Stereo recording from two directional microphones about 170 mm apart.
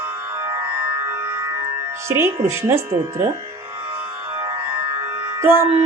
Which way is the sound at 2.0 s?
15° right (ahead or behind).